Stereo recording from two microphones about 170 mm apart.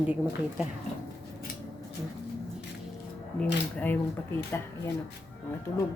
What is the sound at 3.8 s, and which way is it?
Speech, 10° left (ahead or behind).